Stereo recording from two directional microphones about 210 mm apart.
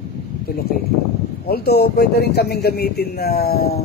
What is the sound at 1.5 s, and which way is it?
A man's voice, 50° left (ahead or behind).